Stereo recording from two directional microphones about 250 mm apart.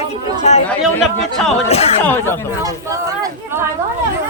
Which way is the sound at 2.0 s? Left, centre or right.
Centre.